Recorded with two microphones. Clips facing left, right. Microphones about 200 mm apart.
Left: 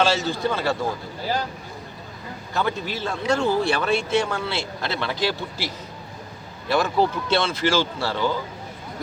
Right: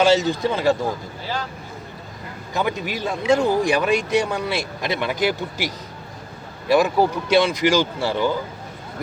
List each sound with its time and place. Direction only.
0.0 s speech: 20° right (ahead or behind)
2.5 s speech: 15° right (ahead or behind)